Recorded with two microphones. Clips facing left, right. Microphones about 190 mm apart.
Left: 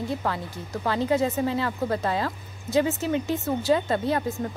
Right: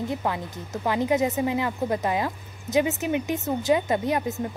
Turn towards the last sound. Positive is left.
turn(degrees=-15)  # may be behind; listen again after turning